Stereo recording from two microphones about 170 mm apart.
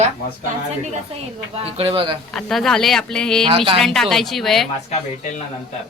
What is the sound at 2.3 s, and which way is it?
A woman's voice, centre (ahead or behind).